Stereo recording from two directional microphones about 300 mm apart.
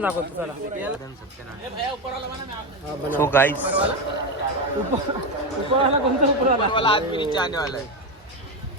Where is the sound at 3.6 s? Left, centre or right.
Centre.